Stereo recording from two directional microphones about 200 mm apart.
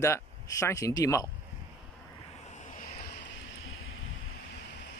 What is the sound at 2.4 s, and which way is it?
Vehicle, 35° left (ahead or behind).